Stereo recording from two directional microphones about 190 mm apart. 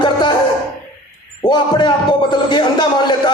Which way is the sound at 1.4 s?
25° left (ahead or behind).